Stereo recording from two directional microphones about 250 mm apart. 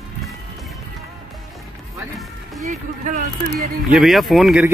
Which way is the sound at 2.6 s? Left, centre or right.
Right.